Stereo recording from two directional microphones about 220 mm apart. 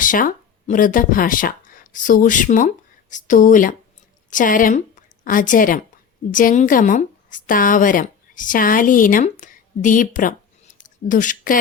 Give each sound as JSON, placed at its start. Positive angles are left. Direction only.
{"t": 0.0, "sound": "a woman's voice", "side_deg": 40}